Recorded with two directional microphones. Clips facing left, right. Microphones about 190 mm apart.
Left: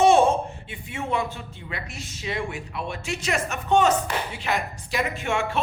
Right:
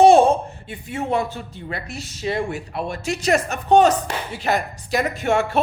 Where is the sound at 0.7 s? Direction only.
40° right (ahead or behind).